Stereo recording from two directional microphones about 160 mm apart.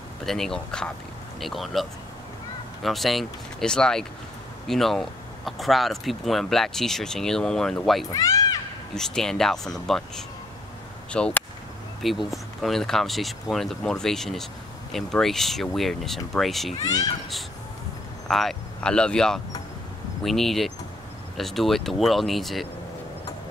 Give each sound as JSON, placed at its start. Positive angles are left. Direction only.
{"t": 0.2, "sound": "speech", "side_deg": 0}
{"t": 8.1, "sound": "speech", "side_deg": 20}
{"t": 8.9, "sound": "speech", "side_deg": 5}
{"t": 18.3, "sound": "speech", "side_deg": 0}